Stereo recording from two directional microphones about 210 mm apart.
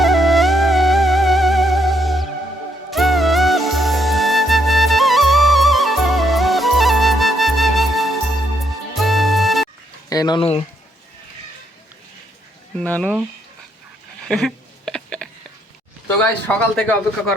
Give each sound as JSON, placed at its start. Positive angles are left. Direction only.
{"t": 0.0, "sound": "music", "side_deg": 0}
{"t": 10.1, "sound": "speech", "side_deg": 20}
{"t": 12.7, "sound": "speech", "side_deg": 5}
{"t": 14.3, "sound": "a sound", "side_deg": 0}
{"t": 16.0, "sound": "a man's voice", "side_deg": 10}